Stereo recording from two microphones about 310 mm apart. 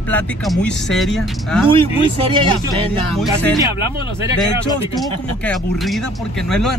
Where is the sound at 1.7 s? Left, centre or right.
Centre.